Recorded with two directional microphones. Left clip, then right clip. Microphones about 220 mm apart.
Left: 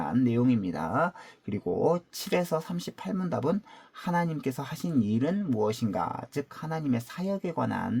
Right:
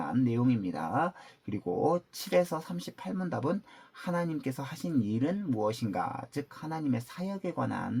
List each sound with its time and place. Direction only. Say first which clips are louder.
0.3 s speech: left 3 dB; 45° left (ahead or behind)